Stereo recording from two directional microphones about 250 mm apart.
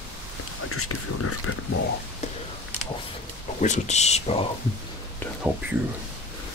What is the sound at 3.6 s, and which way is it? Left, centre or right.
Speech, left.